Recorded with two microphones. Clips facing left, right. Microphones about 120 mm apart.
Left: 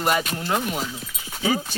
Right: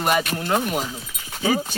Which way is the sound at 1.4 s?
Centre (ahead or behind).